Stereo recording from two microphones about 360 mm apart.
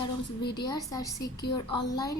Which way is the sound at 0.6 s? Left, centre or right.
Centre.